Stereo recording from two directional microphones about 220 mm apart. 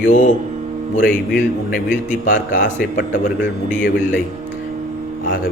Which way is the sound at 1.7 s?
35° left (ahead or behind).